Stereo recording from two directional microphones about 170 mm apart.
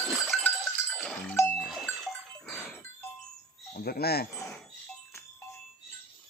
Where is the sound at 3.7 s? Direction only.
60° left (ahead or behind).